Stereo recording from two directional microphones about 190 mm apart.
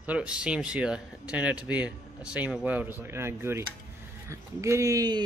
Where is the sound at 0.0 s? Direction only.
5° right (ahead or behind).